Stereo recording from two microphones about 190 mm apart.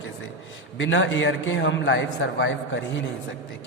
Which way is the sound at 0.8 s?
75° left (ahead or behind).